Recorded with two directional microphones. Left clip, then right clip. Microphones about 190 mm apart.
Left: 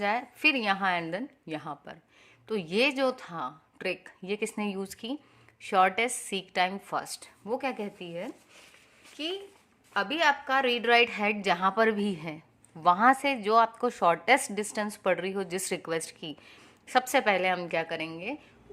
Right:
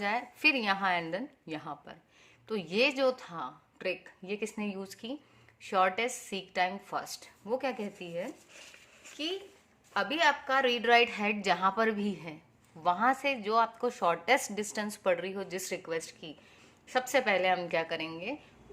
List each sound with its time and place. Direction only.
0.0 s a woman's voice: 20° left (ahead or behind)